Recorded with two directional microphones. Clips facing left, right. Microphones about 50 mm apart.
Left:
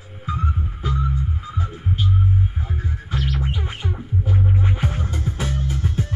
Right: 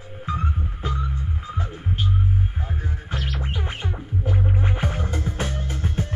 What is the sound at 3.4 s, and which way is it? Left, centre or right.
Music, right.